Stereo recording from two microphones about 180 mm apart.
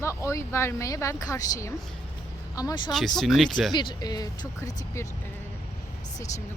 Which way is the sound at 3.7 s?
25° left (ahead or behind).